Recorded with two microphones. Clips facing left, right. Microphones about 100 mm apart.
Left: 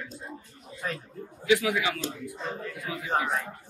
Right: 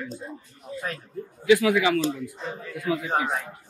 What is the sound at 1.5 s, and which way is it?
Speech, 70° right (ahead or behind).